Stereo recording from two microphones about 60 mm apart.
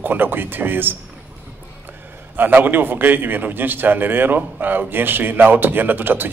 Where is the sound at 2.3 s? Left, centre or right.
Right.